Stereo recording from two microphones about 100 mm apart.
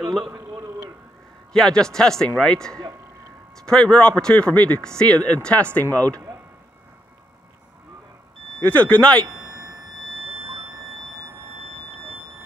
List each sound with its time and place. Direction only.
1.5 s a man's voice: 5° left (ahead or behind)
8.5 s a man's voice: 15° left (ahead or behind)